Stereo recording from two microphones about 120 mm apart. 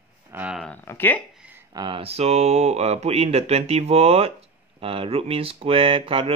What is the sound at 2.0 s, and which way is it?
Speech, 60° right (ahead or behind).